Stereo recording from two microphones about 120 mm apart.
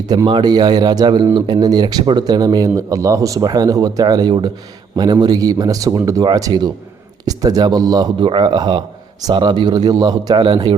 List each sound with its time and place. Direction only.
0.3 s a man's voice: 40° right (ahead or behind)